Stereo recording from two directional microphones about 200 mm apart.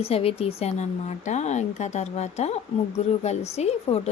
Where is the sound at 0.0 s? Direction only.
30° left (ahead or behind).